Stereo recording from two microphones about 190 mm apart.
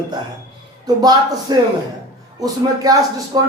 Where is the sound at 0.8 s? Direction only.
20° right (ahead or behind).